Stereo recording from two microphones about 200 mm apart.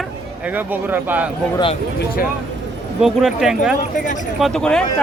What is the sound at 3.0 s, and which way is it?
Speech, centre (ahead or behind).